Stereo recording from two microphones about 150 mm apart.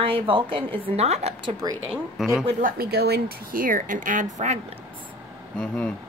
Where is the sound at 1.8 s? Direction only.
Centre (ahead or behind).